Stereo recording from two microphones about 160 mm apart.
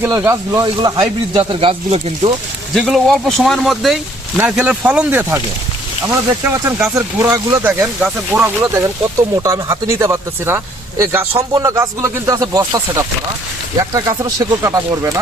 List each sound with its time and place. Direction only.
0.0 s speech: 20° right (ahead or behind); by 2.3 s 35° right (ahead or behind)
2.7 s speech: centre (ahead or behind)
6.4 s speech: 15° right (ahead or behind)